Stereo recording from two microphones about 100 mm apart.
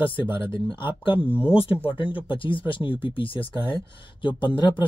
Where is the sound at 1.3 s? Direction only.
20° left (ahead or behind).